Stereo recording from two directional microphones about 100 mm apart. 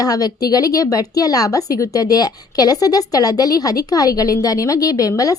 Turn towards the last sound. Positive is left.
turn(degrees=35)  # may be behind; listen again after turning